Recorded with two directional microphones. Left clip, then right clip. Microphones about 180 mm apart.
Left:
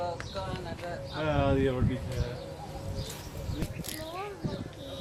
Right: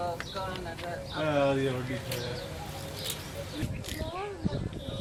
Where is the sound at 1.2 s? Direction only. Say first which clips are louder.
Right 2 dB; 55° left (ahead or behind).